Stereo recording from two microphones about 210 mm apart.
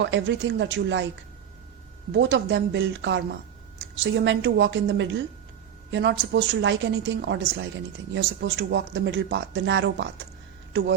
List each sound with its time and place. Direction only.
0.0 s a woman's voice: 60° right (ahead or behind)
2.1 s a woman's voice: 55° right (ahead or behind)